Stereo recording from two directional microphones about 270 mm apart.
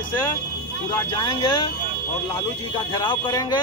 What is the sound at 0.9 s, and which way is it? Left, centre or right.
Speech, centre.